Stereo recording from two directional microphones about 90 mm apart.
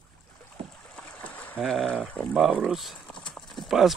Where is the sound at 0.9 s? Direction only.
15° left (ahead or behind).